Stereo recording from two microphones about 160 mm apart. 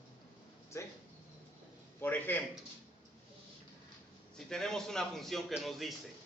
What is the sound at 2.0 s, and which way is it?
Speech, 10° left (ahead or behind).